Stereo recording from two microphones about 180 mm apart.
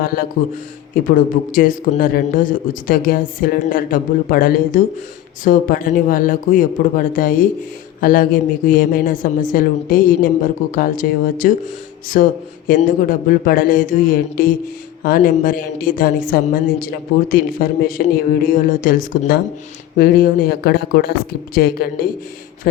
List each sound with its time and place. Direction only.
0.0 s speech: 55° left (ahead or behind)